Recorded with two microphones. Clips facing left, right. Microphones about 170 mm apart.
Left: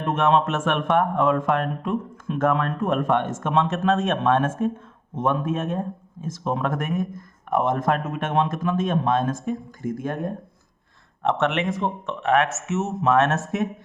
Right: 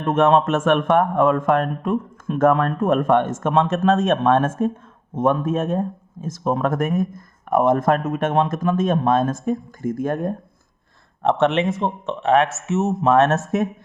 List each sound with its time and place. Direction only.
0.0 s speech: 45° right (ahead or behind)
11.2 s speech: 35° right (ahead or behind)